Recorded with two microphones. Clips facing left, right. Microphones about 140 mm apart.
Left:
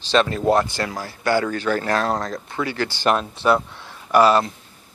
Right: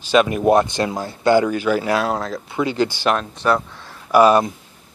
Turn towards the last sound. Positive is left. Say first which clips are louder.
# right 3 dB
turn(degrees=-15)  # may be behind; listen again after turning